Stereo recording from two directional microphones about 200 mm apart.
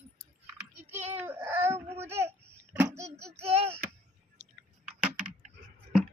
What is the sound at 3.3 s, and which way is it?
Speech, 30° right (ahead or behind).